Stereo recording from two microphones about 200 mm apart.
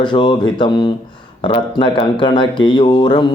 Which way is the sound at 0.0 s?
25° left (ahead or behind).